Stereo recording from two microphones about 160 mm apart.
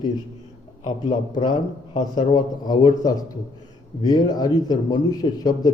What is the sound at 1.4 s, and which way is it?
A man's voice, 30° left (ahead or behind).